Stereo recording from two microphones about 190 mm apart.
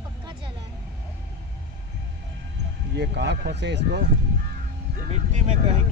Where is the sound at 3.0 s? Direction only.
65° right (ahead or behind).